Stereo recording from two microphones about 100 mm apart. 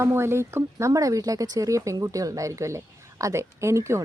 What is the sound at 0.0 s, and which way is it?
Speech, 25° right (ahead or behind).